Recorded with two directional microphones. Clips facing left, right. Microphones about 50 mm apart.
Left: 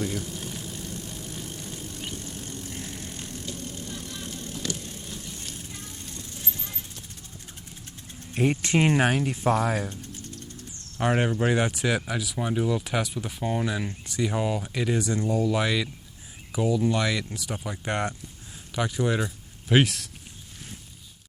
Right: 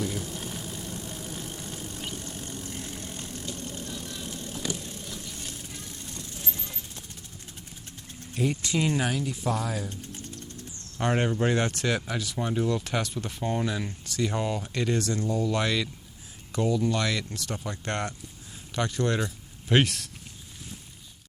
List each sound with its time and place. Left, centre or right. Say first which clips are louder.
0.1 s vehicle: left 1 dB; centre
2.8 s vehicle: even; centre
3.1 s vehicle: even; centre
8.3 s speech: left 4 dB; left
10.9 s speech: left 2 dB; centre